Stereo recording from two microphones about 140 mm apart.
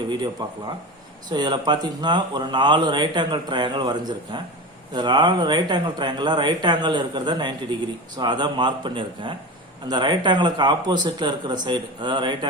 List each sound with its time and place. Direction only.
0.1 s speech: 30° right (ahead or behind)